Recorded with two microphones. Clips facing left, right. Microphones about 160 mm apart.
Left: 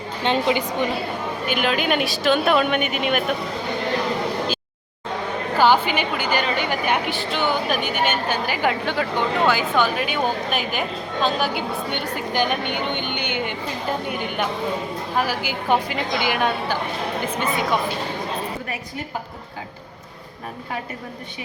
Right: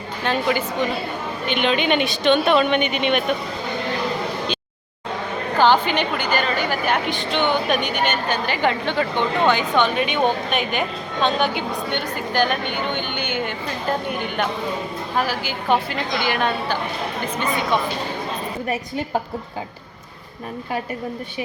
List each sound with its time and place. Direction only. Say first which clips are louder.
0.2 s a woman's voice: left 1 dB; 20° left (ahead or behind)
1.5 s a woman's voice: right 2 dB; 5° left (ahead or behind)
5.5 s a woman's voice: right 1 dB; 10° left (ahead or behind)
15.1 s a woman's voice: even; 10° left (ahead or behind)